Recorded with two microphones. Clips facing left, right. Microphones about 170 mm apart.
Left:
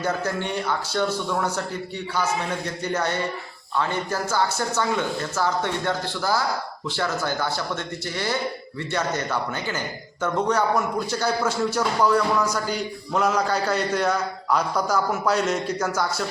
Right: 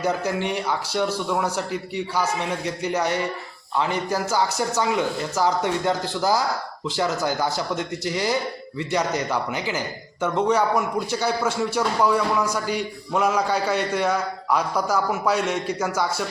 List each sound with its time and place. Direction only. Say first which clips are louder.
0.4 s a man's voice: right 1 dB; 10° right (ahead or behind)